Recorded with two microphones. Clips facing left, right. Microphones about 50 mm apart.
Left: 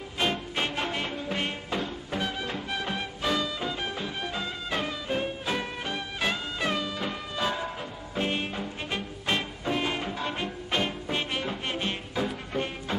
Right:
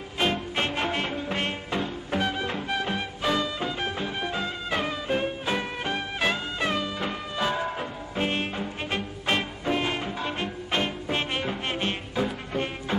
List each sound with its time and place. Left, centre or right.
0.2 s music: centre